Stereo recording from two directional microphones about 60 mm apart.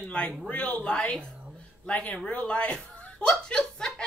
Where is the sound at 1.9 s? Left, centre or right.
Left.